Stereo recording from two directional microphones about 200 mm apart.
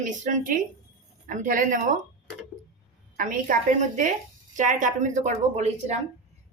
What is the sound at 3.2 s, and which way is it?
Speech, 40° right (ahead or behind).